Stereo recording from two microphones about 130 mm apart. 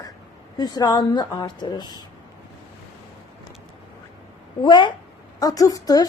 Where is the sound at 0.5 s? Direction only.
30° left (ahead or behind).